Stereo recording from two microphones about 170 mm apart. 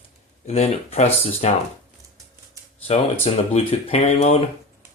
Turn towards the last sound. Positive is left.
turn(degrees=40)  # may be behind; listen again after turning